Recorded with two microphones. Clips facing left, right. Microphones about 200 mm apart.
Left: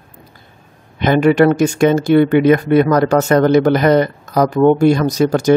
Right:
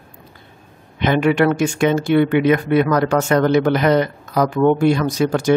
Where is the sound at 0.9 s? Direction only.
40° left (ahead or behind).